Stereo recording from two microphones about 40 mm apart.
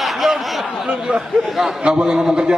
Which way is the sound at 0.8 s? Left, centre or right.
Centre.